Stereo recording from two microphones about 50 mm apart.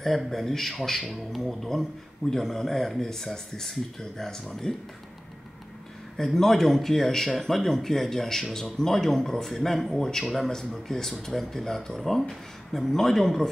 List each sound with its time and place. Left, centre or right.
0.0 s speech: centre
6.1 s speech: centre